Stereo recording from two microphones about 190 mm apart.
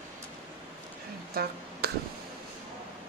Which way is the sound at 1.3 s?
55° right (ahead or behind).